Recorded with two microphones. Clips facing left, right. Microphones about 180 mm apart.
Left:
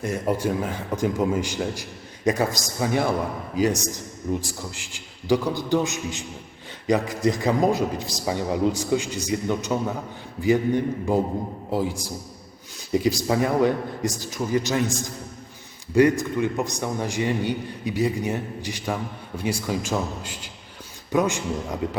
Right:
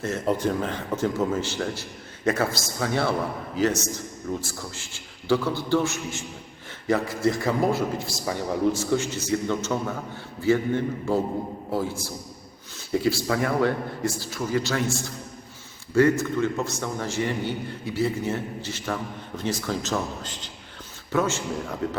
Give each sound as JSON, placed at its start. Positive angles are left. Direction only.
{"t": 0.0, "sound": "speech", "side_deg": 10}